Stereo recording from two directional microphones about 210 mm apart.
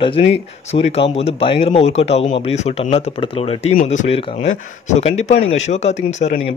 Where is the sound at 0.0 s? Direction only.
25° left (ahead or behind).